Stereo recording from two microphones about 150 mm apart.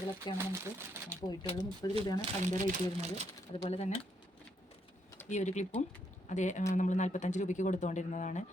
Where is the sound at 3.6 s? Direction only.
45° left (ahead or behind).